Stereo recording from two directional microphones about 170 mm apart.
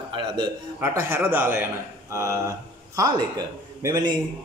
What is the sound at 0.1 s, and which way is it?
Speech, 30° right (ahead or behind).